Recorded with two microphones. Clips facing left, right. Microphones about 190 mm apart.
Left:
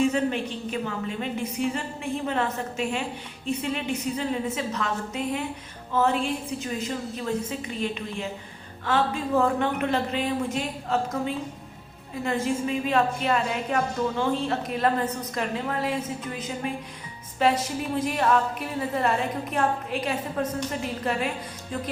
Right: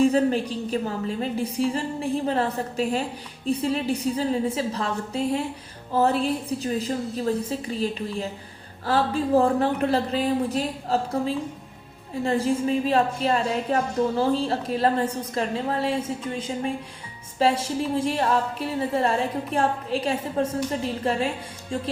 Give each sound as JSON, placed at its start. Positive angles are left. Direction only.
{"t": 0.0, "sound": "a woman's voice", "side_deg": -35}